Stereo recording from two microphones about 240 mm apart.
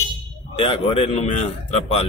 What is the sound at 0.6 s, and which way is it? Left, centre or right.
Speech, left.